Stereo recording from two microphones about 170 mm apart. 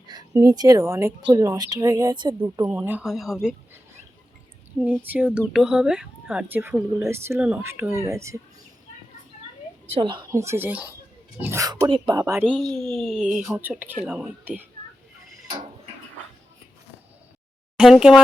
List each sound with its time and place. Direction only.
0.3 s speech: 20° right (ahead or behind)
2.6 s speech: 10° right (ahead or behind)
4.8 s speech: 10° right (ahead or behind)
9.9 s speech: 30° right (ahead or behind)
10.3 s speech: 15° right (ahead or behind)
12.5 s speech: centre (ahead or behind)
17.7 s speech: 5° right (ahead or behind)